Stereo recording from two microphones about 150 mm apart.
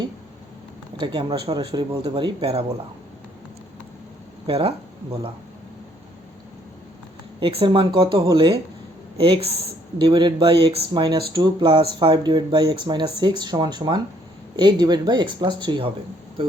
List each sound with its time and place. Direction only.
0.9 s speech: 30° right (ahead or behind)
4.4 s speech: 40° right (ahead or behind)
7.3 s speech: 35° right (ahead or behind)